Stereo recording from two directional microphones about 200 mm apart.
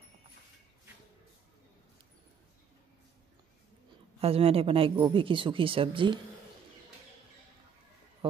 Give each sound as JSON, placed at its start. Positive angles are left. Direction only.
{"t": 4.2, "sound": "speech", "side_deg": -30}